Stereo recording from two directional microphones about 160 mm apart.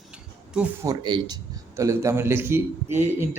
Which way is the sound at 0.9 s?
25° right (ahead or behind).